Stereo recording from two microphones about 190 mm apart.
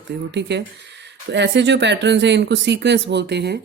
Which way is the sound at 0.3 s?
65° right (ahead or behind).